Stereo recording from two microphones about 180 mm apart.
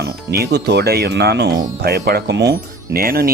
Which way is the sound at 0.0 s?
65° right (ahead or behind).